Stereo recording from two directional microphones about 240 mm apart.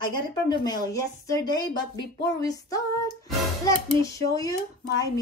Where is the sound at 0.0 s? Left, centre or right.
Centre.